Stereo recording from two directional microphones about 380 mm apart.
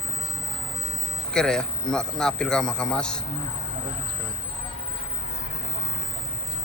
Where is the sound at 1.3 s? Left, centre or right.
Centre.